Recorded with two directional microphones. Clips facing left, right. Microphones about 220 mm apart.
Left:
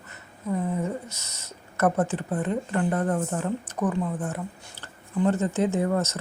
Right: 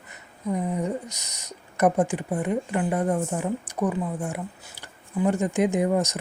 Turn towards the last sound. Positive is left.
turn(degrees=-15)  # may be behind; listen again after turning